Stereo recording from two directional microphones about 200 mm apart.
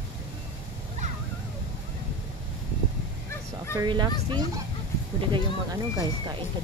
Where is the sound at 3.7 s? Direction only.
20° right (ahead or behind).